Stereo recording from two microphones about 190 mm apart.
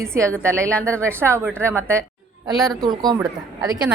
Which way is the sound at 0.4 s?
15° right (ahead or behind).